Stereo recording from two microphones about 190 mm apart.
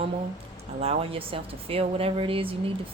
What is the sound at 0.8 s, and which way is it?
A woman's voice, 30° right (ahead or behind).